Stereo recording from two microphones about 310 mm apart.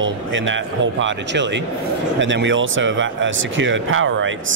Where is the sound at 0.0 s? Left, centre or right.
Right.